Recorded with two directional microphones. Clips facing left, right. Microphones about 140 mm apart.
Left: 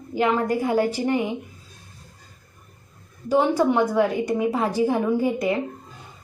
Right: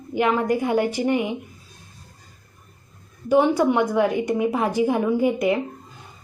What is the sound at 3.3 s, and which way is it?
A woman's voice, 15° right (ahead or behind).